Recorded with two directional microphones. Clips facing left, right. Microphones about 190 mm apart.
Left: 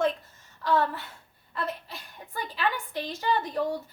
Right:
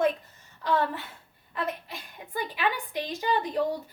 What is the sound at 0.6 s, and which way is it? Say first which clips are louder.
A woman's voice: left 1 dB; 15° right (ahead or behind).